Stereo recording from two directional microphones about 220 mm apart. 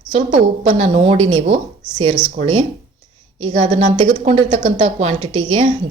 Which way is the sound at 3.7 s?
25° right (ahead or behind).